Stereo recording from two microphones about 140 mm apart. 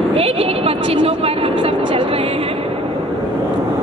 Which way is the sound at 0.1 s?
45° right (ahead or behind).